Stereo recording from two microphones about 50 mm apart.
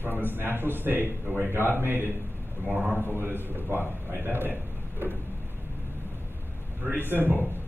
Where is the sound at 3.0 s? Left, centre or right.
Right.